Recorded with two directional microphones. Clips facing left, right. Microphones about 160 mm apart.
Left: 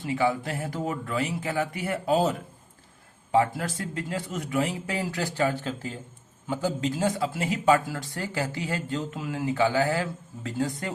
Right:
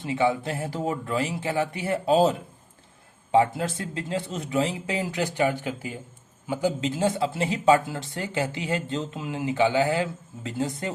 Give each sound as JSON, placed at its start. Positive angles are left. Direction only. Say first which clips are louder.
{"t": 0.0, "sound": "speech", "louder": "right 2 dB", "side_deg": -25}
{"t": 3.3, "sound": "speech", "louder": "right 2 dB", "side_deg": -25}